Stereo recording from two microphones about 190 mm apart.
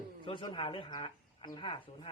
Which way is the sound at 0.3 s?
25° left (ahead or behind).